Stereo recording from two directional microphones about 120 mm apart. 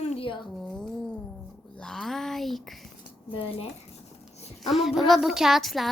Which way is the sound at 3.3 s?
50° left (ahead or behind).